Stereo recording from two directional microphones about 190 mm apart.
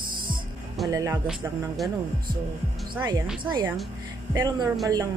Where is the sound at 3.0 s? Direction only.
10° right (ahead or behind).